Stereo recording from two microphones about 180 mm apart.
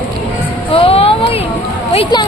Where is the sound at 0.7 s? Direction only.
30° left (ahead or behind).